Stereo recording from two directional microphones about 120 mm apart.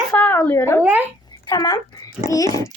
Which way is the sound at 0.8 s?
15° right (ahead or behind).